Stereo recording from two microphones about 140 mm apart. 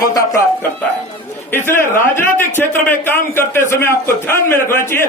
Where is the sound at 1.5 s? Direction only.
15° left (ahead or behind).